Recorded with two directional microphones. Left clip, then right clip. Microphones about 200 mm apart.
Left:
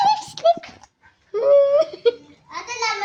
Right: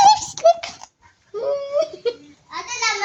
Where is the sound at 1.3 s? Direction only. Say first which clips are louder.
Left 8 dB; 30° left (ahead or behind).